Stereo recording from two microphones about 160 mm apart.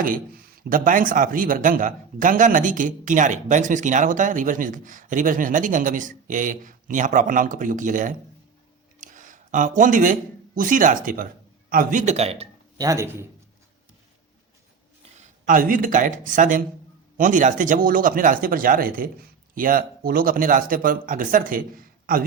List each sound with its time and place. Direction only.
0.0 s speech: 65° right (ahead or behind); by 12.5 s 40° right (ahead or behind)
12.7 s speech: 20° right (ahead or behind)
15.4 s speech: 60° right (ahead or behind)